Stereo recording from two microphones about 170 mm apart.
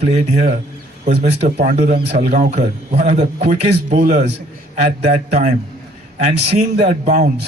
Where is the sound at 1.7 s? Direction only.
45° right (ahead or behind).